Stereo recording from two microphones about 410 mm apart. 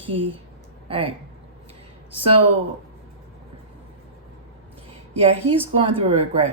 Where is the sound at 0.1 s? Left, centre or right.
Right.